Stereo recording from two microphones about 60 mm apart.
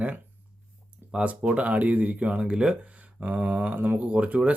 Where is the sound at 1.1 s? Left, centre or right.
Right.